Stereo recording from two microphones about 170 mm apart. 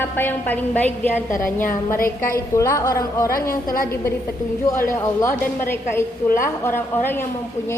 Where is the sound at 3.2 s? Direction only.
60° left (ahead or behind).